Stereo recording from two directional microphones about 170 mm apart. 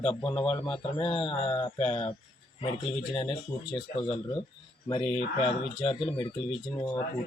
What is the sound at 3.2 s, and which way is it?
Speech, 30° left (ahead or behind).